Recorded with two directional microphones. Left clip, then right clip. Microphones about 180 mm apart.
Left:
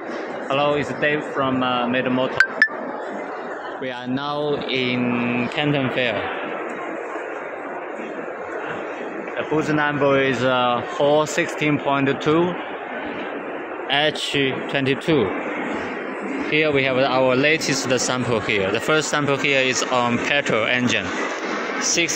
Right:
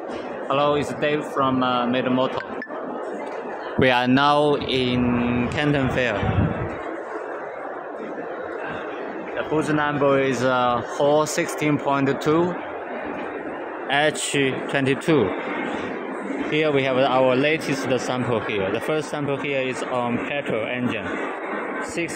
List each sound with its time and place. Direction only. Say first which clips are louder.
0.5 s speech: even; 15° right (ahead or behind)
3.8 s speech: right 12 dB; 60° right (ahead or behind)
4.6 s speech: even; 25° right (ahead or behind)
5.6 s speech: even; 10° right (ahead or behind)
9.6 s speech: left 1 dB; centre (ahead or behind)
13.9 s speech: left 1 dB; 5° right (ahead or behind)
16.4 s speech: left 2 dB; 5° right (ahead or behind)